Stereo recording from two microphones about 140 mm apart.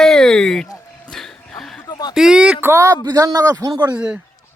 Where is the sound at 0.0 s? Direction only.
5° left (ahead or behind).